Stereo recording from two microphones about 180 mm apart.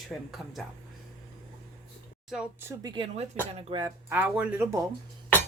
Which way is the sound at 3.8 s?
10° right (ahead or behind).